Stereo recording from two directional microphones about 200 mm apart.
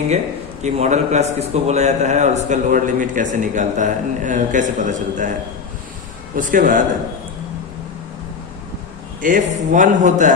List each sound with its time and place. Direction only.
0.6 s a man's voice: 35° right (ahead or behind)
6.3 s a man's voice: 40° right (ahead or behind)
9.2 s a man's voice: 40° right (ahead or behind)